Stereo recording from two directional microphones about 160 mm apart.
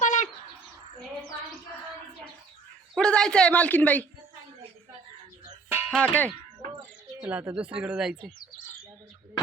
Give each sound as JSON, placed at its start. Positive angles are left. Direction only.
{"t": 0.0, "sound": "bird", "side_deg": 50}
{"t": 2.9, "sound": "speech", "side_deg": 5}
{"t": 5.9, "sound": "speech", "side_deg": 5}
{"t": 7.2, "sound": "speech", "side_deg": -10}